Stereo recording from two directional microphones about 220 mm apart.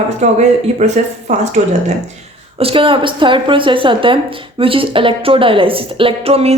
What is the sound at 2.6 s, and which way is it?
A woman's voice, 25° right (ahead or behind).